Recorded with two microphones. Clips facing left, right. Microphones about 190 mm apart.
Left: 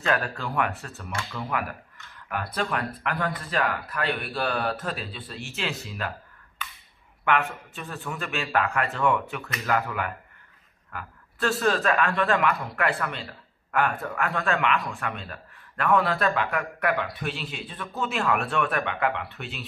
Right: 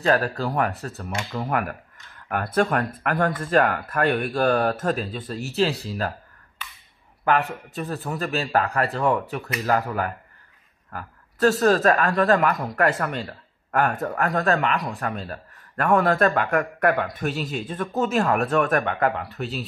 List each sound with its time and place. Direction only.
0.0 s a man's voice: 40° right (ahead or behind)
7.2 s a man's voice: 35° right (ahead or behind)